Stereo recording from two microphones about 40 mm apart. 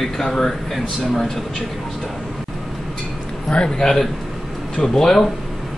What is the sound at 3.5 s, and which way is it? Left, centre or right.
Speech, left.